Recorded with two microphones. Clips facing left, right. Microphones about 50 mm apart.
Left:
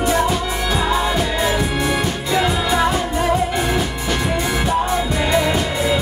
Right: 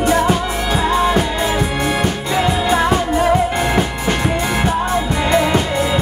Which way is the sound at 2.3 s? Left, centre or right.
Centre.